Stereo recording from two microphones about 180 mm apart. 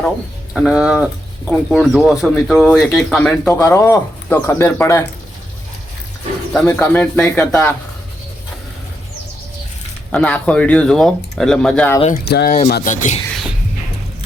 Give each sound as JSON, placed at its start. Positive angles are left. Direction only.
{"t": 0.5, "sound": "speech", "side_deg": -5}
{"t": 6.5, "sound": "speech", "side_deg": 5}
{"t": 10.1, "sound": "speech", "side_deg": 5}
{"t": 12.3, "sound": "speech", "side_deg": 65}
{"t": 12.6, "sound": "speech", "side_deg": 50}